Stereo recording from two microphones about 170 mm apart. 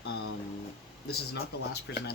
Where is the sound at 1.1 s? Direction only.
70° left (ahead or behind).